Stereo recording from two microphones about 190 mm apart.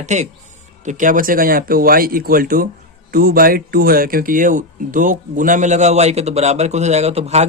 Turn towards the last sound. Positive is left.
turn(degrees=-35)  # may be behind; listen again after turning